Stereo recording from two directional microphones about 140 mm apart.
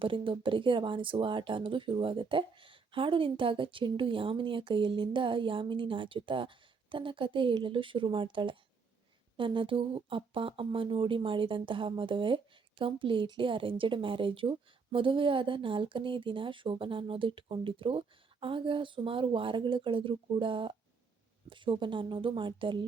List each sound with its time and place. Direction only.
0.0 s speech: 35° right (ahead or behind)